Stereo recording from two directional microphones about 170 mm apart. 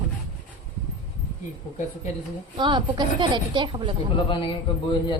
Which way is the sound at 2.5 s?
25° right (ahead or behind).